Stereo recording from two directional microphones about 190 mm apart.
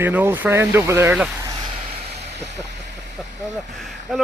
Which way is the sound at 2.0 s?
35° right (ahead or behind).